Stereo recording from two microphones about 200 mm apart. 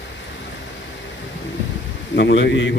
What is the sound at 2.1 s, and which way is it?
Speech, 60° left (ahead or behind).